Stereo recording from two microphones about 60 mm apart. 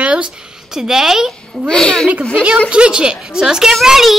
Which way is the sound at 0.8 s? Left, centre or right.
Centre.